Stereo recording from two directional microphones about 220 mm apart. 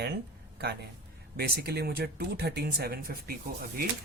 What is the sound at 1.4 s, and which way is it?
Speech, 45° right (ahead or behind).